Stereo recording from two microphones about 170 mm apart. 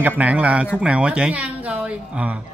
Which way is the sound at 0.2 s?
10° right (ahead or behind).